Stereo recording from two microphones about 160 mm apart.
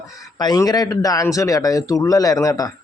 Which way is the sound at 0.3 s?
25° left (ahead or behind).